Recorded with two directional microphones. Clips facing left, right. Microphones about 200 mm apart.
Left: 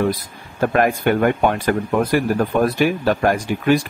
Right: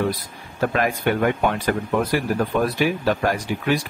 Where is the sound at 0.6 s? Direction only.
50° left (ahead or behind).